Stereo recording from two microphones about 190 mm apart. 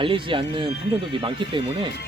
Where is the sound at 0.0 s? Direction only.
25° right (ahead or behind).